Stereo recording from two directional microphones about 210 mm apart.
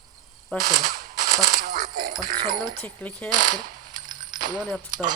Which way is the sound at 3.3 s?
40° right (ahead or behind).